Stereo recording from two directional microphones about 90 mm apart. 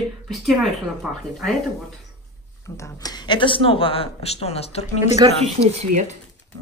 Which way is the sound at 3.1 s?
55° left (ahead or behind).